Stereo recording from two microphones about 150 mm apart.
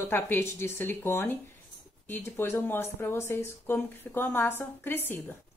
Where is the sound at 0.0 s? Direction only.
15° left (ahead or behind).